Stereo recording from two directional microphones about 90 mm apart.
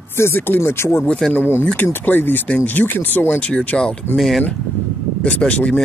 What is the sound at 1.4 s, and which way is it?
Speech, 25° left (ahead or behind).